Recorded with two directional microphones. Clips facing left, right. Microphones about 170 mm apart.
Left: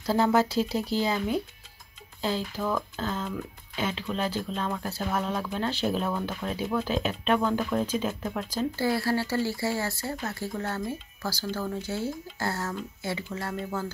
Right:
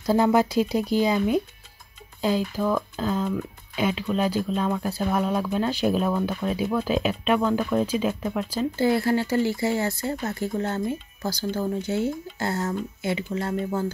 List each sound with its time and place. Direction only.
0.0 s speech: 15° right (ahead or behind)
8.7 s speech: 20° right (ahead or behind)